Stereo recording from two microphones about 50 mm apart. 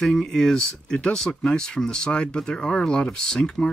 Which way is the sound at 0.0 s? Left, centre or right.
Centre.